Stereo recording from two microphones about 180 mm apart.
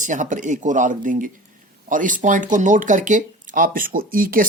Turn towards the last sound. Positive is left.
turn(degrees=-50)  # may be behind; listen again after turning